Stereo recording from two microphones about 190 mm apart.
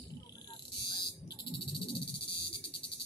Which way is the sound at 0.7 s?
55° left (ahead or behind).